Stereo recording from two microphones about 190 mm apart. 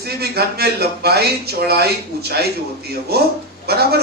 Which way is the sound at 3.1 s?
55° right (ahead or behind).